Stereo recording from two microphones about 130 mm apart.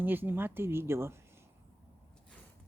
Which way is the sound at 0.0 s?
15° right (ahead or behind).